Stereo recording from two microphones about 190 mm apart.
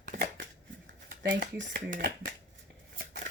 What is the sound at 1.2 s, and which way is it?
Speech, 65° right (ahead or behind).